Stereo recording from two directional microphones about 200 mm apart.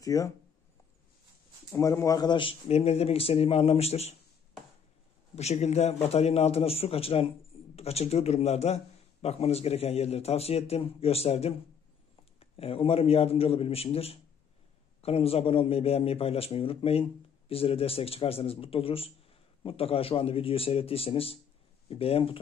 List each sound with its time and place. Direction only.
0.0 s speech: 15° left (ahead or behind)
1.8 s a man's voice: 15° left (ahead or behind); by 4.2 s 30° left (ahead or behind)
5.3 s a man's voice: 30° left (ahead or behind)